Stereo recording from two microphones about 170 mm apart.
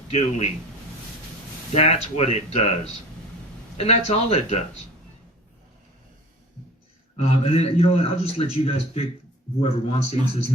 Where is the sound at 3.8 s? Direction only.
40° left (ahead or behind).